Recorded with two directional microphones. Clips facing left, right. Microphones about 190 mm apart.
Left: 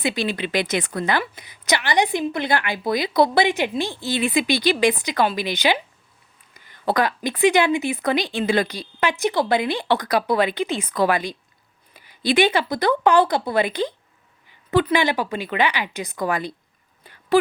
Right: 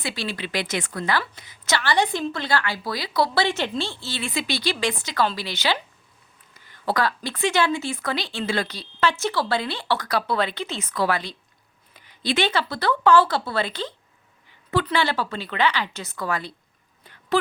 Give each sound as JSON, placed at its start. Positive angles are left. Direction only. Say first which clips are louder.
{"t": 0.0, "sound": "a woman's voice", "louder": "left 6 dB", "side_deg": 15}